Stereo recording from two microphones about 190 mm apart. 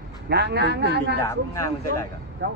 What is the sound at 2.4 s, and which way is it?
Speech, 60° right (ahead or behind).